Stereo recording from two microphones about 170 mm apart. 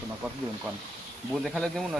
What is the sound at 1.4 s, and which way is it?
Speech, centre (ahead or behind).